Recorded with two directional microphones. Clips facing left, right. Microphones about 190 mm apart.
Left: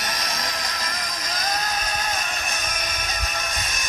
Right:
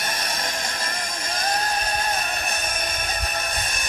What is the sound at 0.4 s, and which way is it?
Music, 25° right (ahead or behind).